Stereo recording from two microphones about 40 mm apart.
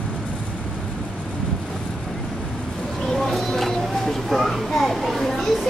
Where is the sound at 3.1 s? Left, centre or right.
Centre.